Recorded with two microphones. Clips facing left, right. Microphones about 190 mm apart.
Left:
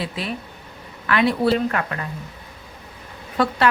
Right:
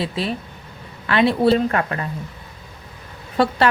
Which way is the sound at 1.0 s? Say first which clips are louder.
Right 3 dB; 30° right (ahead or behind).